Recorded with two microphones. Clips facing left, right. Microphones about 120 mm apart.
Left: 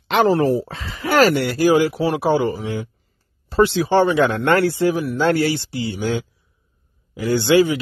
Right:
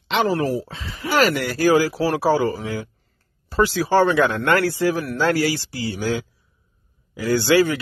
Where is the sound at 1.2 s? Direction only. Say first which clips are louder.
Left 4 dB; 35° left (ahead or behind).